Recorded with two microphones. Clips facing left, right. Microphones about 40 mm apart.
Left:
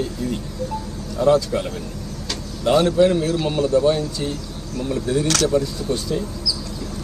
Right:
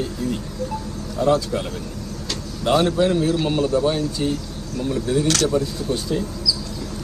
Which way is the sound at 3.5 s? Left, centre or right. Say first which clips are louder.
Left 2 dB; centre.